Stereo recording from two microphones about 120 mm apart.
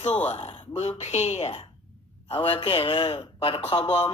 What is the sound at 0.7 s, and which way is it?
Speech, 60° left (ahead or behind).